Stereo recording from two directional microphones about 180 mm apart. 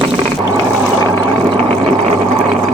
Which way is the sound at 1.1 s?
25° right (ahead or behind).